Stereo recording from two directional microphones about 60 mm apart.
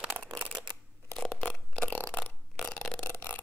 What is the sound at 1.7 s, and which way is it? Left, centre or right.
Burping, left.